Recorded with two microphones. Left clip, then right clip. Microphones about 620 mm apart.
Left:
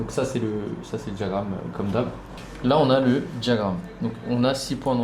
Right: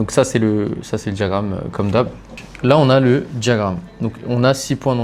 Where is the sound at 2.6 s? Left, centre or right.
Right.